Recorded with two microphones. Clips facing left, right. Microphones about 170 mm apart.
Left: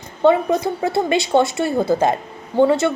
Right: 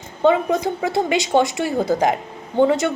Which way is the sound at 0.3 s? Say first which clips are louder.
Left 1 dB; 15° right (ahead or behind).